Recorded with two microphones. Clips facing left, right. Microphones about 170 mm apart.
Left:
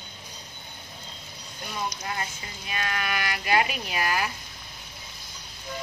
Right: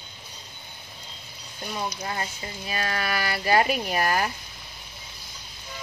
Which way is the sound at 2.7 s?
35° right (ahead or behind).